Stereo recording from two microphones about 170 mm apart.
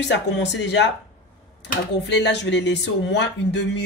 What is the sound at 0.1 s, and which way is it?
Speech, 90° left.